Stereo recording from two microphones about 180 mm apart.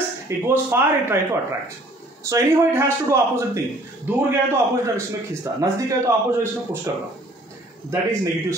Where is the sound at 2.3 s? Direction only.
15° right (ahead or behind).